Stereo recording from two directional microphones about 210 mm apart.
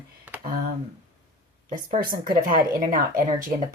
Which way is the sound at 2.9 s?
40° right (ahead or behind).